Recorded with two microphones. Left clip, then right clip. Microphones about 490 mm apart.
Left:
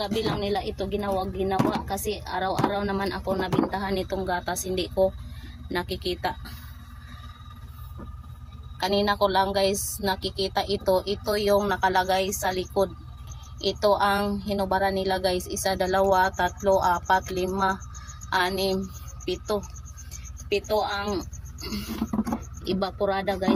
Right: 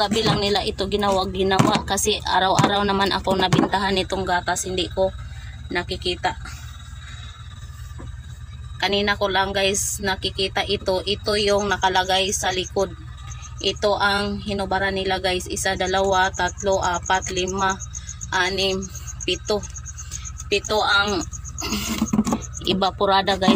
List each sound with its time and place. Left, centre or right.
0.0 s speech: left
8.7 s speech: left
21.1 s speech: left